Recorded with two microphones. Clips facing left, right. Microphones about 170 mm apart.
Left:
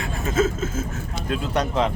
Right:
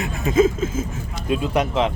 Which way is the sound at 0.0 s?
15° right (ahead or behind).